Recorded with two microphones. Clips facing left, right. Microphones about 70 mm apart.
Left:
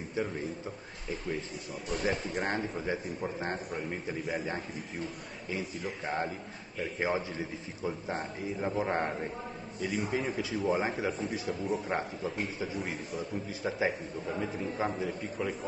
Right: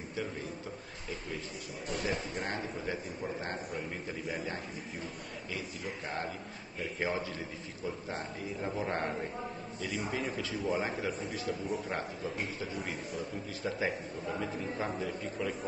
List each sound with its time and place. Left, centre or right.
2.3 s a man's voice: left
7.0 s a man's voice: left
13.5 s a man's voice: centre